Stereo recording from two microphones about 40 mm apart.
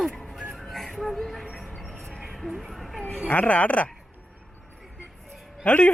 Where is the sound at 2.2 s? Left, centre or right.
Centre.